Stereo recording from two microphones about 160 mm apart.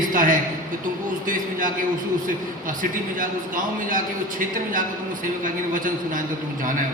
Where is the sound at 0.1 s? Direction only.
60° right (ahead or behind).